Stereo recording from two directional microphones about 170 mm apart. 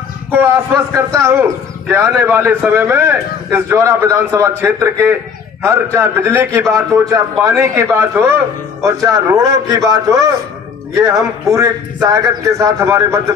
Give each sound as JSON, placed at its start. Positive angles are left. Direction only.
{"t": 0.9, "sound": "a man's voice", "side_deg": -15}